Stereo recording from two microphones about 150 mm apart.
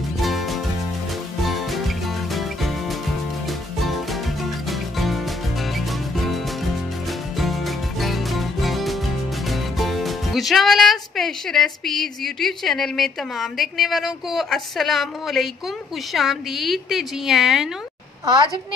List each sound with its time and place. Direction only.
0.2 s music: centre (ahead or behind)
9.5 s a woman's voice: centre (ahead or behind)
18.2 s a woman's voice: 30° right (ahead or behind)